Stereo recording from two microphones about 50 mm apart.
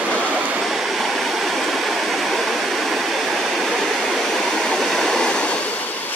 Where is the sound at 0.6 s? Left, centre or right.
Centre; by 5.6 s left.